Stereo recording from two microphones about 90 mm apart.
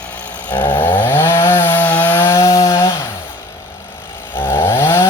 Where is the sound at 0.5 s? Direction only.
20° left (ahead or behind).